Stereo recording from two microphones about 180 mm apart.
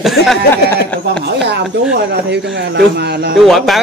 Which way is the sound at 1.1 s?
65° right (ahead or behind).